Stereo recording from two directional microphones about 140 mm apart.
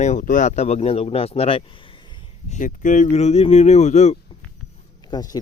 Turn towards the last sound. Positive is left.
turn(degrees=30)  # may be behind; listen again after turning